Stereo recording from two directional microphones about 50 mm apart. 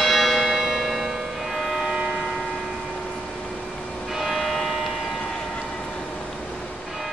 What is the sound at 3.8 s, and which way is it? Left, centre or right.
Church bell, centre.